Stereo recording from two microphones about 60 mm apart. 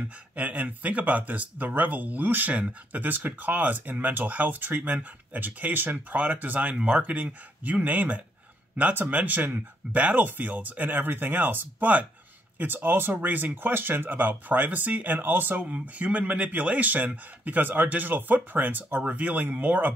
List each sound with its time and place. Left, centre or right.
0.4 s speech: right